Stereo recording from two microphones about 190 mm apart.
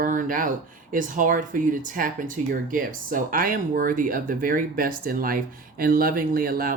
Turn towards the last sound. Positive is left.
turn(degrees=-50)  # may be behind; listen again after turning